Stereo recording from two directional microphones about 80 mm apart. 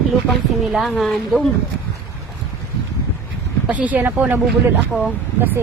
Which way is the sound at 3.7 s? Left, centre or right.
Centre.